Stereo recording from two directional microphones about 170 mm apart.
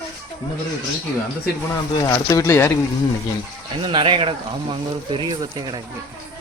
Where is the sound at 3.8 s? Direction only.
30° right (ahead or behind).